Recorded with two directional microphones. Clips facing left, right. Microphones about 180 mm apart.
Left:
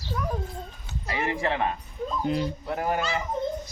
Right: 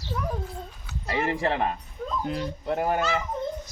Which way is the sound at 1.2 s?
35° right (ahead or behind).